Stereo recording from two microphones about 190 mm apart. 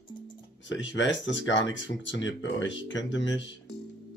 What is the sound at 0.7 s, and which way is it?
Speech, 75° left (ahead or behind).